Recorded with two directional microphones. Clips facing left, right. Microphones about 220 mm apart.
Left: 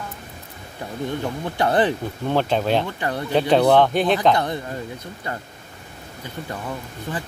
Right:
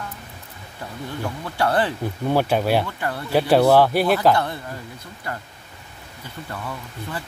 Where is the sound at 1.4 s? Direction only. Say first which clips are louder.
Left 2 dB; 20° left (ahead or behind).